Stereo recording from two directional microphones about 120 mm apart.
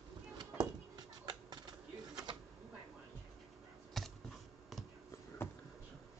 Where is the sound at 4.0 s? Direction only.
Centre (ahead or behind).